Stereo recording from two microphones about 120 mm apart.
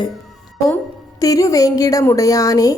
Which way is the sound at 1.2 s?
30° left (ahead or behind).